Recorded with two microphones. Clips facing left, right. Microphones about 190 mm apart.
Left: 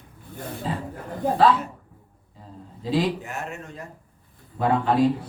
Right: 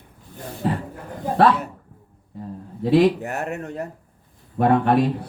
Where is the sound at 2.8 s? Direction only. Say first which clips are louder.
Right 8 dB; 60° right (ahead or behind).